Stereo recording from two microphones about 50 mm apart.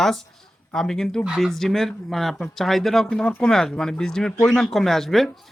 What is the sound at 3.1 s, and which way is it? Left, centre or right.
Speech, centre.